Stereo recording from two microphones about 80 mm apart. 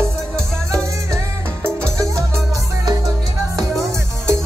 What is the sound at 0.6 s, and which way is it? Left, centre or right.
Music, right.